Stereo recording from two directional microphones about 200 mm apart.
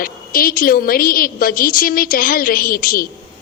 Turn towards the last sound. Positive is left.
turn(degrees=45)  # may be behind; listen again after turning